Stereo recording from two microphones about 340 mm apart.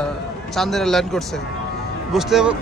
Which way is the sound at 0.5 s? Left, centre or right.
Centre.